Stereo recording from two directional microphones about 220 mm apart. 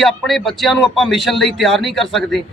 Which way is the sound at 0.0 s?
Centre (ahead or behind).